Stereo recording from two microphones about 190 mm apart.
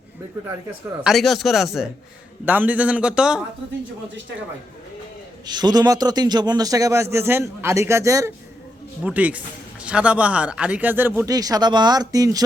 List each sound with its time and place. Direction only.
1.0 s a man's voice: centre (ahead or behind)
5.5 s a man's voice: 20° right (ahead or behind)